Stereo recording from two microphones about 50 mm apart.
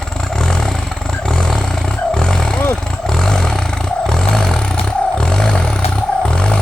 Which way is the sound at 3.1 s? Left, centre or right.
Centre.